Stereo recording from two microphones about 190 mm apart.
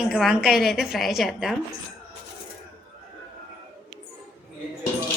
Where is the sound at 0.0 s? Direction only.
5° right (ahead or behind).